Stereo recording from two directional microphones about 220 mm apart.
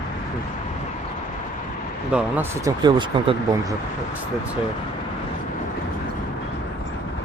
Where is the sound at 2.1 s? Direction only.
10° right (ahead or behind).